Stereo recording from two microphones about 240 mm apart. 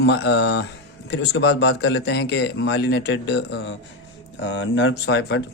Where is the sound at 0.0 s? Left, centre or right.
Left.